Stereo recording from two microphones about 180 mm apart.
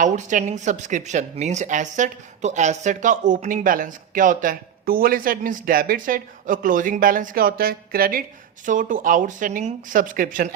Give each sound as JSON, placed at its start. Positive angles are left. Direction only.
{"t": 0.0, "sound": "speech", "side_deg": -45}
{"t": 8.6, "sound": "speech", "side_deg": -45}